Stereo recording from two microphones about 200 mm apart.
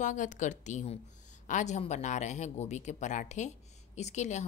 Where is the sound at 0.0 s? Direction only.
40° left (ahead or behind).